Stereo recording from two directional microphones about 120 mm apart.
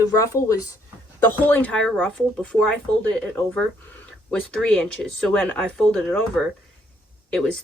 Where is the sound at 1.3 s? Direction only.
15° left (ahead or behind).